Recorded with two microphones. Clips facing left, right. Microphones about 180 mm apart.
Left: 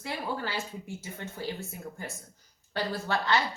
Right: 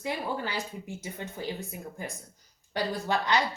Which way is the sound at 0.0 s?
20° right (ahead or behind).